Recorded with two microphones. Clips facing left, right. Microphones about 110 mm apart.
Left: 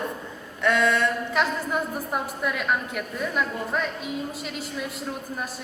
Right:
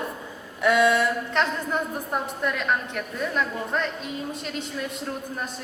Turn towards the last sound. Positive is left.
turn(degrees=5)  # may be behind; listen again after turning